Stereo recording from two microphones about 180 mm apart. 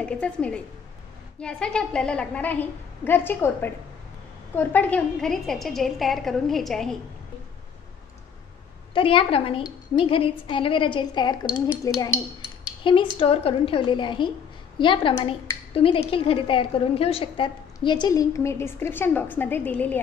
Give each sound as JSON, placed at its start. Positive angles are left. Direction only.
{"t": 0.0, "sound": "a woman's voice", "side_deg": 5}
{"t": 8.9, "sound": "a woman's voice", "side_deg": 30}